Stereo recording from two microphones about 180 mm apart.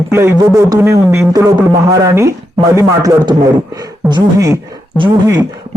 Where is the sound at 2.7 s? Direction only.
20° right (ahead or behind).